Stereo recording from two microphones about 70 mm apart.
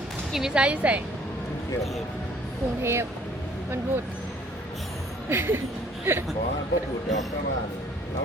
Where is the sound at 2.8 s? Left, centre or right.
Right.